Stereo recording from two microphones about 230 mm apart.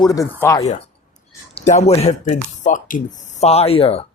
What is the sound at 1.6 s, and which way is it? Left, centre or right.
Speech, left.